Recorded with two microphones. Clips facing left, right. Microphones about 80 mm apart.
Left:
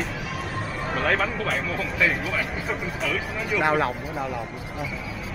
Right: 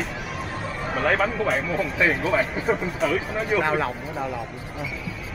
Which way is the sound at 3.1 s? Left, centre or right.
Right.